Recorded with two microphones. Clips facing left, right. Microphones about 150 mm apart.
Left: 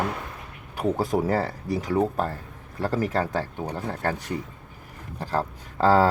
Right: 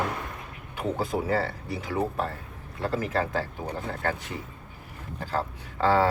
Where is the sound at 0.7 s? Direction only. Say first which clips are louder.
Left 4 dB; 40° left (ahead or behind).